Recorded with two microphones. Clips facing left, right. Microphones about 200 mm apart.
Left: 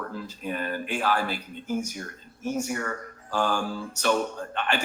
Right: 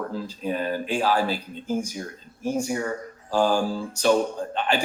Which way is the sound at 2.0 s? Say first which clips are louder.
Right 3 dB; 10° right (ahead or behind).